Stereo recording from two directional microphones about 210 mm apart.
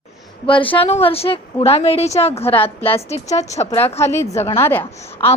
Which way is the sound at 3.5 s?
10° left (ahead or behind).